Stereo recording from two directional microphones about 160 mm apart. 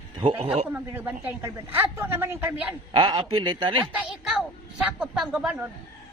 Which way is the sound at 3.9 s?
5° right (ahead or behind).